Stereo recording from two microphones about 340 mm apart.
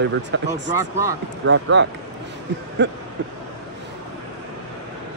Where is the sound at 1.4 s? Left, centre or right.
Right.